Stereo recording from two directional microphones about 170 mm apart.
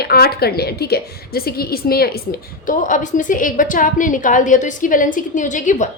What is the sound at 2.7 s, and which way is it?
A woman's voice, 50° left (ahead or behind).